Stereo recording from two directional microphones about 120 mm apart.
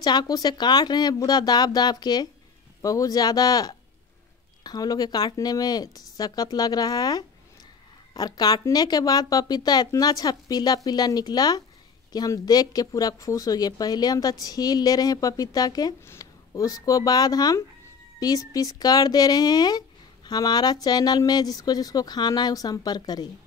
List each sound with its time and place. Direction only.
0.0 s a woman's voice: 35° left (ahead or behind)